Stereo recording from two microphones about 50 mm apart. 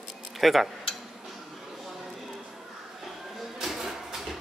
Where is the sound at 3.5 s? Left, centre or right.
Centre.